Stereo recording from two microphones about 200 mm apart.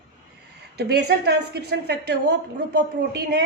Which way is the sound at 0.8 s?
55° right (ahead or behind).